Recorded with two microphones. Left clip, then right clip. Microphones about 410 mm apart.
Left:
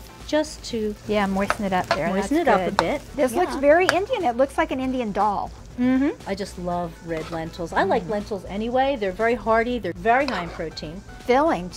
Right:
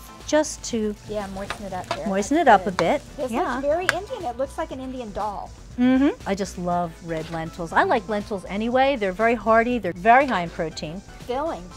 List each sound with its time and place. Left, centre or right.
0.3 s speech: right
1.1 s speech: left
2.1 s speech: right
3.6 s speech: left
5.8 s speech: right
11.2 s speech: left